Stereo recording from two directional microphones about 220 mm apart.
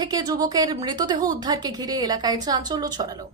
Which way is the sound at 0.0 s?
20° right (ahead or behind).